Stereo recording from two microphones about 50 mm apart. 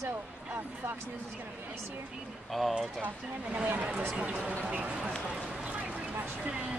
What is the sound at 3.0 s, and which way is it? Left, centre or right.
Speech, right.